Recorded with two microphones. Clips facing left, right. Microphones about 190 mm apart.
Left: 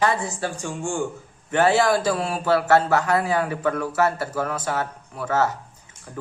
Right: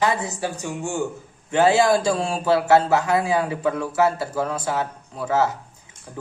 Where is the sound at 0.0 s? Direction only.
15° right (ahead or behind).